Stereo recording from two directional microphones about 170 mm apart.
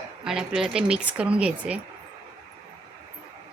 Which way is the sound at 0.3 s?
5° right (ahead or behind).